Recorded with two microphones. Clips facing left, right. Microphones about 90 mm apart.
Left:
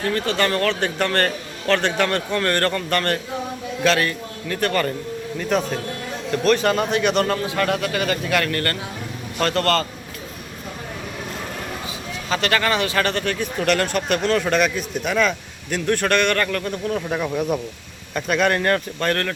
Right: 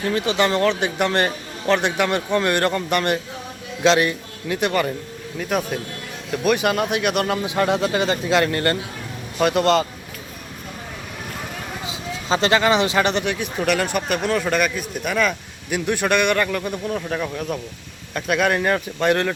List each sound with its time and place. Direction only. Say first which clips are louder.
0.1 s speech: right 2 dB; 15° right (ahead or behind)
7.4 s a man's voice: right 2 dB; 20° right (ahead or behind)
12.3 s speech: right 3 dB; 20° right (ahead or behind); by 17.0 s 5° right (ahead or behind)
17.1 s speech: left 3 dB; 5° left (ahead or behind); by 19.3 s 15° right (ahead or behind)